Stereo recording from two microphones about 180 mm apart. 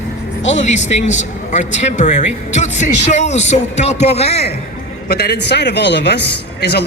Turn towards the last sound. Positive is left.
turn(degrees=65)  # may be behind; listen again after turning